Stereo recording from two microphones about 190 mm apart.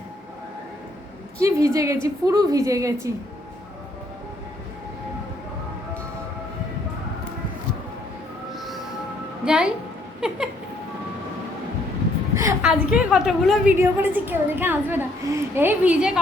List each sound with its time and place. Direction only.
1.4 s a woman's voice: 15° right (ahead or behind)
8.5 s music: centre (ahead or behind)
9.4 s a woman's voice: 5° right (ahead or behind)
12.3 s a sound: 15° right (ahead or behind)
12.6 s a woman's voice: 5° right (ahead or behind)